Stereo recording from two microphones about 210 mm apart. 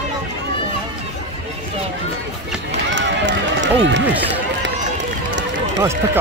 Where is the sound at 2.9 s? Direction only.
60° right (ahead or behind).